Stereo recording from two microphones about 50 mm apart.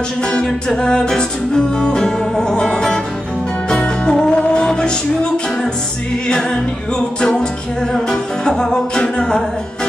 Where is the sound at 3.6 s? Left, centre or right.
Centre.